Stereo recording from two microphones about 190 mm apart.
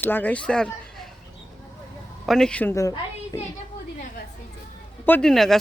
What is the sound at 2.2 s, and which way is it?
A woman's voice, 5° left (ahead or behind).